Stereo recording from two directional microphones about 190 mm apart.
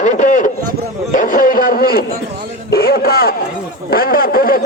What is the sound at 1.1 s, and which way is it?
A man's voice, 45° left (ahead or behind).